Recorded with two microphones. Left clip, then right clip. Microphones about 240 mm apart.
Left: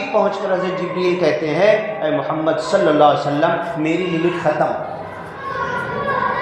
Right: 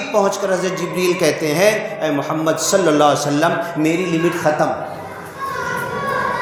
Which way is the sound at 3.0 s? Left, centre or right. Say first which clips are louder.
Left 1 dB; right.